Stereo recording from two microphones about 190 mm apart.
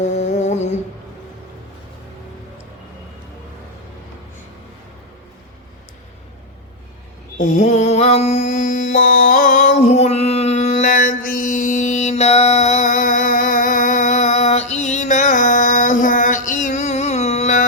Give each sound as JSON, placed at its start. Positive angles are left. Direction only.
{"t": 0.0, "sound": "humming", "side_deg": 40}
{"t": 7.3, "sound": "mantra", "side_deg": 40}